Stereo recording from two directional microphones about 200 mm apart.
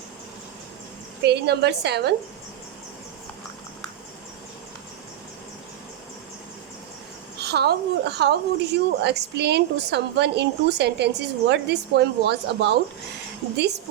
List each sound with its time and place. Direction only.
1.2 s a woman's voice: 55° right (ahead or behind)
7.3 s a woman's voice: 55° right (ahead or behind)